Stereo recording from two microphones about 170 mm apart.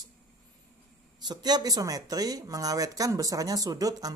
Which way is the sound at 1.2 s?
25° right (ahead or behind).